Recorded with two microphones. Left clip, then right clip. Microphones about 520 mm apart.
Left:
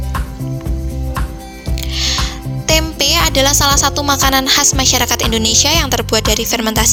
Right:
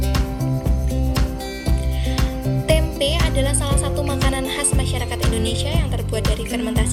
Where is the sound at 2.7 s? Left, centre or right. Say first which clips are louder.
Left 6 dB; centre.